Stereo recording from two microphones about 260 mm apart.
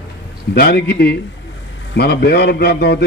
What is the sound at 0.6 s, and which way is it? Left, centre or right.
A man's voice, left.